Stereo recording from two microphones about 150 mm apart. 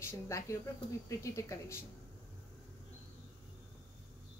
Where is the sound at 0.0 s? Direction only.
20° left (ahead or behind).